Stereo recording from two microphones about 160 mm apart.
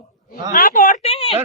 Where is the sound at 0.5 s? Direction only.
60° left (ahead or behind).